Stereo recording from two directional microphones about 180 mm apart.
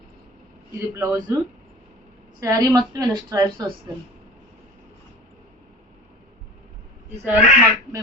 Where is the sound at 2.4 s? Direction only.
15° right (ahead or behind).